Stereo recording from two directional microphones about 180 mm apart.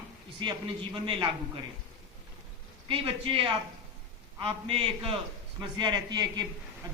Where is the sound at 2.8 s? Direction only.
30° right (ahead or behind).